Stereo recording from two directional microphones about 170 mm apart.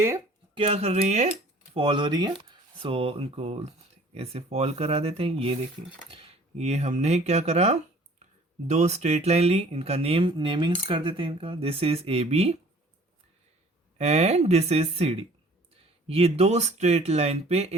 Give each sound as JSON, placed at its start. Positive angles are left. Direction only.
{"t": 0.5, "sound": "speech", "side_deg": -35}
{"t": 1.7, "sound": "speech", "side_deg": -30}
{"t": 6.6, "sound": "speech", "side_deg": -40}
{"t": 14.0, "sound": "speech", "side_deg": -40}